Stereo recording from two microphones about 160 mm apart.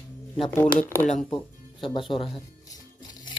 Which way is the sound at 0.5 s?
10° left (ahead or behind).